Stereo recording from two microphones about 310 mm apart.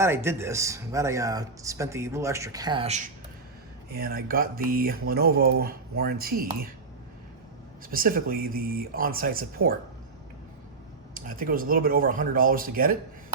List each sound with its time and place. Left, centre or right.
0.0 s speech: centre
3.8 s speech: right
7.9 s speech: right
11.1 s speech: right